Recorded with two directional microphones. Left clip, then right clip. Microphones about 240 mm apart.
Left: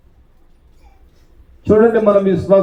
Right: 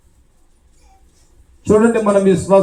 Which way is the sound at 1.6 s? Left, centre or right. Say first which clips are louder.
Left 2 dB; right.